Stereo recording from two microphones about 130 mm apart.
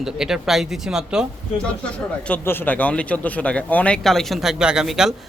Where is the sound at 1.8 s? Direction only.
10° left (ahead or behind).